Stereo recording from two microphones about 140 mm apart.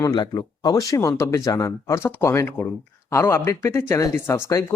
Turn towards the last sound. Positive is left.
turn(degrees=20)  # may be behind; listen again after turning